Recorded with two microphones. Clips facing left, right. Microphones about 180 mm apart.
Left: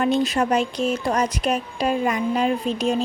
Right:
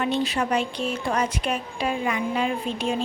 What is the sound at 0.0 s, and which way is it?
A woman's voice, 45° left (ahead or behind).